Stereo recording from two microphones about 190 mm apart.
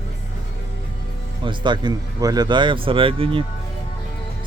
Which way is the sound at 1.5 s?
25° right (ahead or behind).